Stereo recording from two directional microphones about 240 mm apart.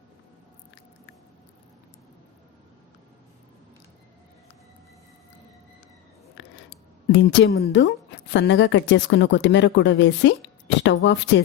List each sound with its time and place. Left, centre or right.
7.1 s a woman's voice: left